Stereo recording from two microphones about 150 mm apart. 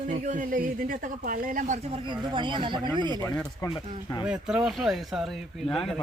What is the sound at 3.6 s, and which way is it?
Speech, 25° left (ahead or behind).